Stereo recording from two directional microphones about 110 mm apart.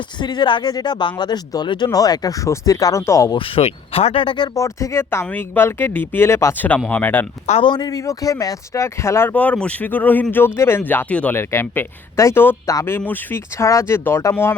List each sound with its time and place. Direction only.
0.2 s speech: 40° left (ahead or behind)
3.3 s speech: 55° left (ahead or behind)
4.5 s speech: 30° left (ahead or behind)
7.6 s speech: 40° left (ahead or behind); by 9.3 s 25° left (ahead or behind)
9.3 s speech: 15° left (ahead or behind)
13.6 s speech: 30° left (ahead or behind)